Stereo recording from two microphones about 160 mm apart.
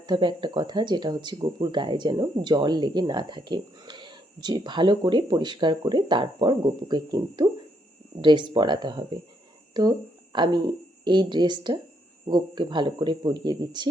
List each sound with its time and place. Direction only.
0.0 s speech: 30° right (ahead or behind)
10.3 s speech: 30° right (ahead or behind)